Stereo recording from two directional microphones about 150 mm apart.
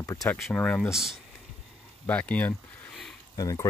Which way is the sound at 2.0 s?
10° left (ahead or behind).